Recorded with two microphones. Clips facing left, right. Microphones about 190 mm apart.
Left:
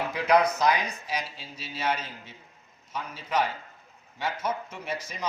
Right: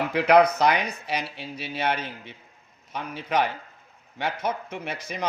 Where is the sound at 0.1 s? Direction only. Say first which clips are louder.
Right 5 dB; 60° right (ahead or behind).